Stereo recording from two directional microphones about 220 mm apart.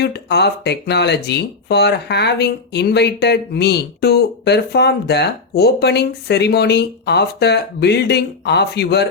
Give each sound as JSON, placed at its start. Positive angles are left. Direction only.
{"t": 0.0, "sound": "speech", "side_deg": 50}